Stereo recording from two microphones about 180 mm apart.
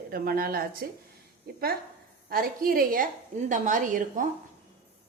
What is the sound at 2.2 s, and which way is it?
A woman's voice, 55° right (ahead or behind).